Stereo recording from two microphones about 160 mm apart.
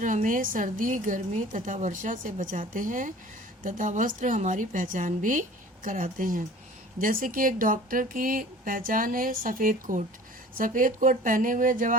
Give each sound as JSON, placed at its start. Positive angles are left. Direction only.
{"t": 0.0, "sound": "a woman's voice", "side_deg": -55}